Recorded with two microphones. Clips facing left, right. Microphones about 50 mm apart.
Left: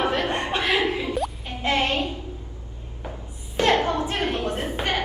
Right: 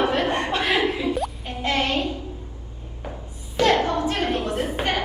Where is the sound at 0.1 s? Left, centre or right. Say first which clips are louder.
Right 2 dB; right.